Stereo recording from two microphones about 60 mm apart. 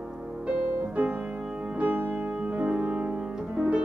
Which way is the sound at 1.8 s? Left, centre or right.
Right.